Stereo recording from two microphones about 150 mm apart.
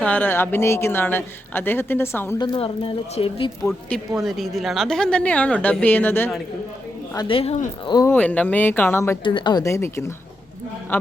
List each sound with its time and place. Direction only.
0.0 s a woman's voice: 10° left (ahead or behind)
2.4 s speech: 30° left (ahead or behind)
3.7 s a woman's voice: 5° left (ahead or behind)
7.2 s speech: 35° left (ahead or behind)
7.9 s speech: 25° left (ahead or behind)
8.1 s a woman's voice: 10° left (ahead or behind)
9.2 s speech: 30° left (ahead or behind)